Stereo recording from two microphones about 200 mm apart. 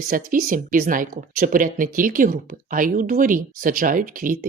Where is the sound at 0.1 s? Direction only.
45° right (ahead or behind).